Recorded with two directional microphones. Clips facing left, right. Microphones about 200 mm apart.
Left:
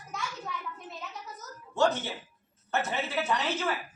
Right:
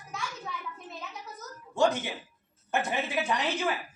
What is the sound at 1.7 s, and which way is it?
Speech, 10° right (ahead or behind).